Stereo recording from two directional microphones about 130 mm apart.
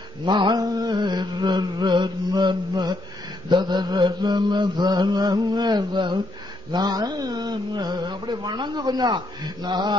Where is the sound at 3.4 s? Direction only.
35° right (ahead or behind).